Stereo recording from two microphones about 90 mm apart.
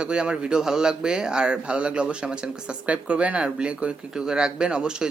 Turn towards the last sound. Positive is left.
turn(degrees=-10)  # may be behind; listen again after turning